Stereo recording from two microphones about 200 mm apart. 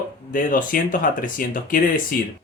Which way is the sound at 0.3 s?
45° left (ahead or behind).